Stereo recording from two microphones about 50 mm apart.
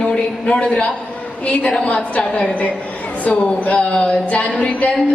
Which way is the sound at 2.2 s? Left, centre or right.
Centre.